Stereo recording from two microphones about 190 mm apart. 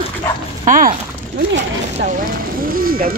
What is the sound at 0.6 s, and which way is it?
Speech, 45° right (ahead or behind).